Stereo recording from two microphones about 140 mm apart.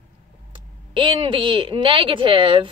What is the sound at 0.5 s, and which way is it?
Speech, 35° right (ahead or behind).